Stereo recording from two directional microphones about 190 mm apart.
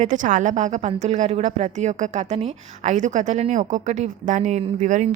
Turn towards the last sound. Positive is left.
turn(degrees=-40)  # may be behind; listen again after turning